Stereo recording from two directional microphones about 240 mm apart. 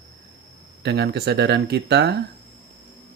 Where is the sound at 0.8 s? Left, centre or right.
Right.